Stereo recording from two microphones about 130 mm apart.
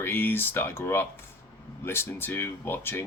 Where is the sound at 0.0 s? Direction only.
15° left (ahead or behind).